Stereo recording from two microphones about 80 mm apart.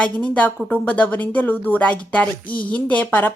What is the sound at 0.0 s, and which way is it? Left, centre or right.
Speech, centre.